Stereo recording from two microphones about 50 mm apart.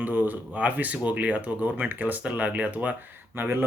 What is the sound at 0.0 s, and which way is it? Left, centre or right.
Speech, right.